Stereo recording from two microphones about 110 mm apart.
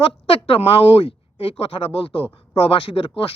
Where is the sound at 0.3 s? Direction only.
55° left (ahead or behind).